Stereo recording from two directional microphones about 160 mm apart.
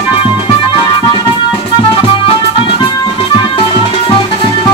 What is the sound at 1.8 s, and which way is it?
Music, 35° left (ahead or behind).